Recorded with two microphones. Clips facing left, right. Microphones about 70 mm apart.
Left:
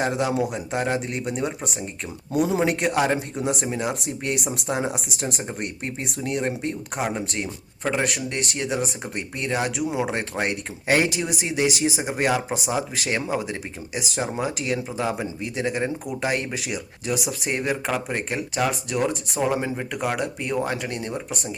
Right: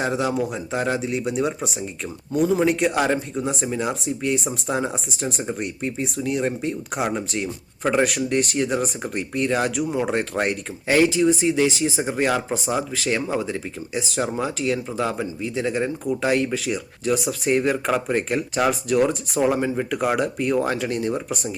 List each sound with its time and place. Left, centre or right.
0.0 s speech: centre
2.3 s speech: centre
2.6 s speech: centre
4.0 s speech: left
5.4 s speech: centre
5.6 s speech: left
7.1 s speech: centre
10.8 s speech: left; by 21.5 s centre